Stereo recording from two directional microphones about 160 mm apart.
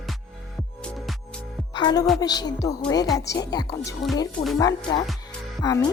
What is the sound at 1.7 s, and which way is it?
Speech, 25° left (ahead or behind).